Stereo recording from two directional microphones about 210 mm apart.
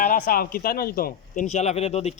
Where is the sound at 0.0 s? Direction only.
40° left (ahead or behind).